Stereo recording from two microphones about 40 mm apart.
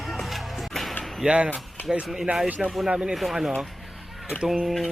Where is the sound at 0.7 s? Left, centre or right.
Centre.